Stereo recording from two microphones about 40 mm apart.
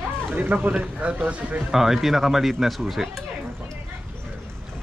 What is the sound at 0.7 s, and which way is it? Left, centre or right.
Speech, right.